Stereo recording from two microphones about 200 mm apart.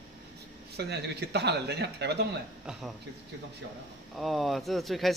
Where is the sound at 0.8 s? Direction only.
55° right (ahead or behind).